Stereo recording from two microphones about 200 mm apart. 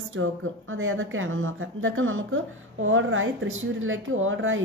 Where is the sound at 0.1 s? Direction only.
90° right.